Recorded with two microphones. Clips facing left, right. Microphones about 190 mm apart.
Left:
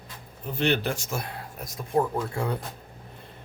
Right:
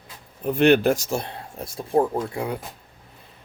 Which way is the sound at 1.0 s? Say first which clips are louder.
Right 5 dB; 25° right (ahead or behind).